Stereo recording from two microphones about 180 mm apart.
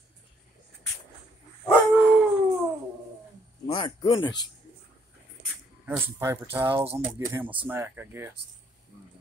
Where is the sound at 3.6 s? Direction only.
25° left (ahead or behind).